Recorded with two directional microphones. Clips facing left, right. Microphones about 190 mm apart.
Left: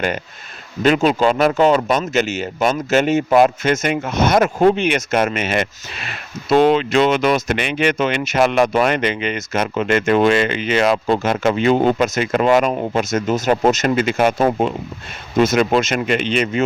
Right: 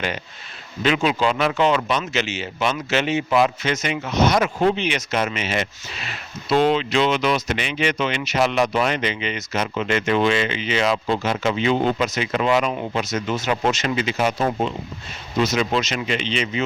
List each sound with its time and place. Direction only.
0.8 s speech: 45° left (ahead or behind)